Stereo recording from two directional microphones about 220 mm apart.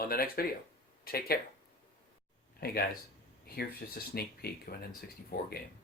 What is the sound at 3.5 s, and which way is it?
Speech, 45° left (ahead or behind).